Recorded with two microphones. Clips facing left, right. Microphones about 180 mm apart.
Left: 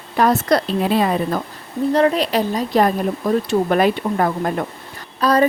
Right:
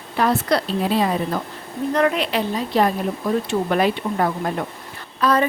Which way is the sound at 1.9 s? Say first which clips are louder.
Left 3 dB; 35° left (ahead or behind).